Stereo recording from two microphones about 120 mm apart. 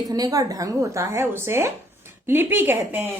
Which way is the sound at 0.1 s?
30° right (ahead or behind).